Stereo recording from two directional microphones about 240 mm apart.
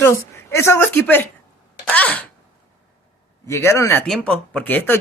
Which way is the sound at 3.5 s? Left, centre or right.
Centre.